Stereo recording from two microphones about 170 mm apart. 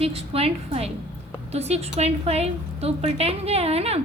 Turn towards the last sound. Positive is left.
turn(degrees=-35)  # may be behind; listen again after turning